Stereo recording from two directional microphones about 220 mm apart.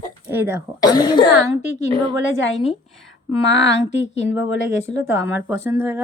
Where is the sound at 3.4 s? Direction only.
55° left (ahead or behind).